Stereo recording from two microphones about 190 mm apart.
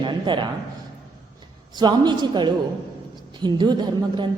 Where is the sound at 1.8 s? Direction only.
25° right (ahead or behind).